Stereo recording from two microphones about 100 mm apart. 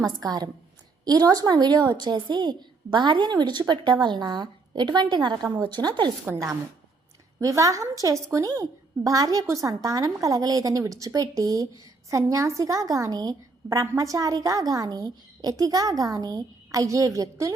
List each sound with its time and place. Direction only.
0.2 s a woman's voice: 40° right (ahead or behind)
6.3 s a woman's voice: 15° right (ahead or behind)
7.3 s a woman's voice: 30° right (ahead or behind)